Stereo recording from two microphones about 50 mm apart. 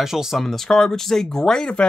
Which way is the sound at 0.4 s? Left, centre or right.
Centre.